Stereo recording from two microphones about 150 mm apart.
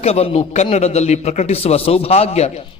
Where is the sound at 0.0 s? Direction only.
45° left (ahead or behind).